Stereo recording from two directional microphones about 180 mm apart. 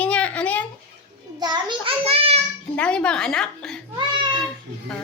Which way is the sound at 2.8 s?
5° left (ahead or behind).